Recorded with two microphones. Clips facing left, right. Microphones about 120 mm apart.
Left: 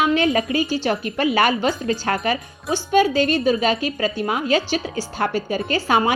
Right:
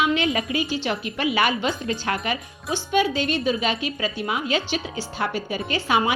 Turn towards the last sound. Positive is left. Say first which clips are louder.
# left 3 dB
turn(degrees=40)  # may be behind; listen again after turning